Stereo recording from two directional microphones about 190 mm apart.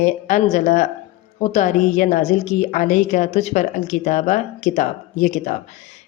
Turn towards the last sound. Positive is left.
turn(degrees=40)  # may be behind; listen again after turning